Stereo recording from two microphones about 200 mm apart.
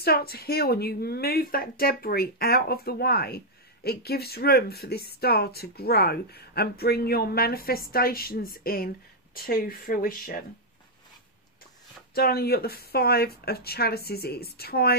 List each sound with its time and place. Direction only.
0.0 s speech: 50° left (ahead or behind)
12.1 s speech: 50° left (ahead or behind)